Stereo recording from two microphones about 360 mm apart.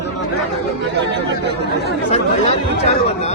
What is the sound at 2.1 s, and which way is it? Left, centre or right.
Speech, centre.